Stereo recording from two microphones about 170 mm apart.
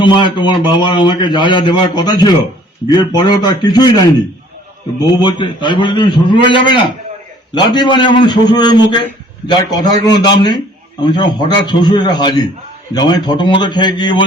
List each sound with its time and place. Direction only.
0.0 s a man's voice: 30° left (ahead or behind)
5.2 s a man's voice: 25° left (ahead or behind)